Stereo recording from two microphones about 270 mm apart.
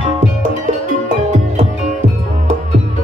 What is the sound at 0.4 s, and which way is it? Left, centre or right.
Music, right.